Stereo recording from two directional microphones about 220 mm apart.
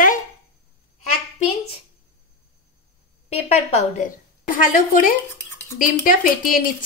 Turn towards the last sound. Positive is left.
turn(degrees=40)  # may be behind; listen again after turning